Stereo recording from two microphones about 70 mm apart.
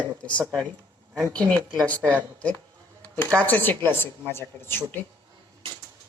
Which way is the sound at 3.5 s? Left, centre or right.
Left.